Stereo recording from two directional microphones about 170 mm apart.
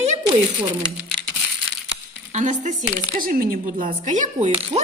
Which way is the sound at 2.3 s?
45° right (ahead or behind).